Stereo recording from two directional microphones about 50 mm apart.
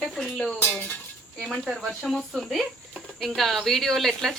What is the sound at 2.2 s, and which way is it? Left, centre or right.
A woman's voice, centre.